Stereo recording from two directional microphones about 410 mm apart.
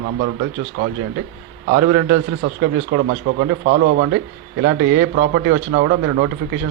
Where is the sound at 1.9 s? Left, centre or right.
Right.